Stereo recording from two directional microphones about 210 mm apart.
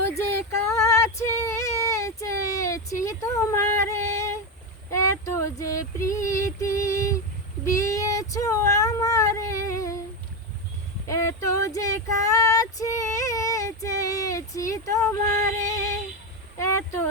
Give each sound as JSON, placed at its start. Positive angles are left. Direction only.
{"t": 0.5, "sound": "female singing", "side_deg": 15}
{"t": 4.9, "sound": "boat", "side_deg": 15}
{"t": 5.2, "sound": "female singing", "side_deg": 15}
{"t": 7.6, "sound": "child singing", "side_deg": 15}
{"t": 11.1, "sound": "female singing", "side_deg": 15}
{"t": 16.6, "sound": "a sound", "side_deg": 10}